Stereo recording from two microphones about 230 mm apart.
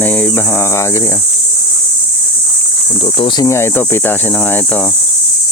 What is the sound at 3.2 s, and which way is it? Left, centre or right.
Speech, centre.